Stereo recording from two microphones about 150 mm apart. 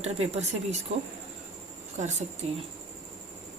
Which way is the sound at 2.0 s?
50° right (ahead or behind).